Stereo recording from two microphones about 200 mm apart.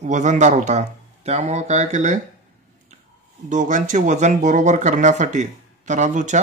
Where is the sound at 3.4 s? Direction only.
40° right (ahead or behind).